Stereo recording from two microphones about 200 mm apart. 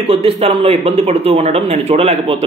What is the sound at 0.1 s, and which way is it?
A man's voice, 30° right (ahead or behind).